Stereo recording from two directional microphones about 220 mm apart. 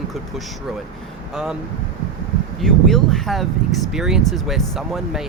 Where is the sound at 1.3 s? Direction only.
5° right (ahead or behind).